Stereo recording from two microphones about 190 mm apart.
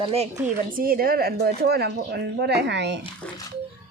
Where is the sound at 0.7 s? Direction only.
50° right (ahead or behind); by 2.9 s 65° right (ahead or behind).